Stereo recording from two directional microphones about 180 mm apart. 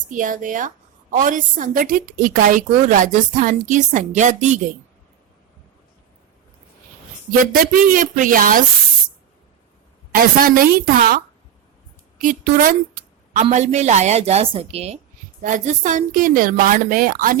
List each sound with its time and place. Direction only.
0.1 s a woman's voice: 45° right (ahead or behind)
7.3 s a woman's voice: 50° right (ahead or behind)
10.1 s a woman's voice: 50° right (ahead or behind)
12.2 s a woman's voice: 45° right (ahead or behind)
15.4 s a woman's voice: 45° right (ahead or behind)